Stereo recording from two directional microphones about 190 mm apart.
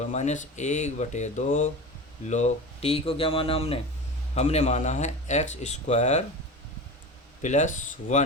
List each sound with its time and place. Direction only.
0.0 s speech: 35° left (ahead or behind)
7.4 s speech: 40° left (ahead or behind)